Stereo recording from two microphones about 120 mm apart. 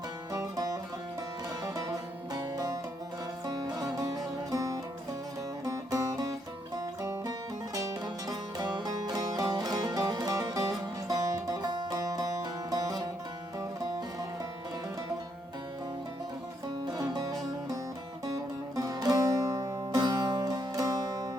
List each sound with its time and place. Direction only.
0.3 s music: 30° right (ahead or behind)
16.8 s music: 35° right (ahead or behind)
18.8 s music: 30° right (ahead or behind)